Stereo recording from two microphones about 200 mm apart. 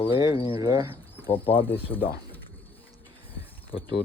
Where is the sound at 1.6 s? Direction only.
10° left (ahead or behind).